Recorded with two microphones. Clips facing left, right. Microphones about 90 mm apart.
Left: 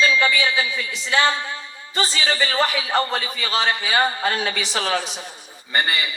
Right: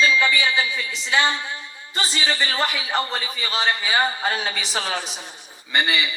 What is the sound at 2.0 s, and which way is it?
A man's voice, 40° left (ahead or behind).